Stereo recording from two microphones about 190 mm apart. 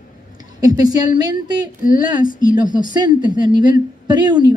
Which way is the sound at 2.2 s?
45° left (ahead or behind).